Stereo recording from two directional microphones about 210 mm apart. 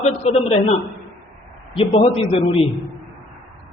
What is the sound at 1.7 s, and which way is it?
Speech, 25° left (ahead or behind).